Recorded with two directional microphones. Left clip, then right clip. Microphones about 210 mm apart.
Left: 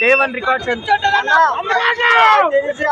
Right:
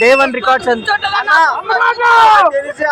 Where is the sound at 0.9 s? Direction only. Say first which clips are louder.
Left 2 dB; 10° left (ahead or behind).